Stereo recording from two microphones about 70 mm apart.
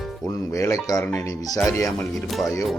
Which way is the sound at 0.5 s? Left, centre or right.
Left.